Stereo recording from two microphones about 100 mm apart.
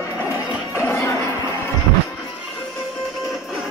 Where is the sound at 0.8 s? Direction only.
30° left (ahead or behind).